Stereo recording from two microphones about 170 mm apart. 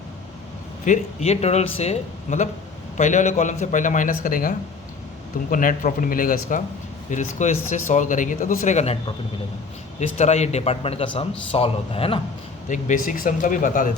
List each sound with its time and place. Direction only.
0.9 s a man's voice: 40° left (ahead or behind)
12.6 s a man's voice: 45° left (ahead or behind)